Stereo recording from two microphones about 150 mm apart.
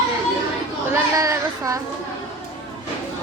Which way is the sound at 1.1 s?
20° right (ahead or behind).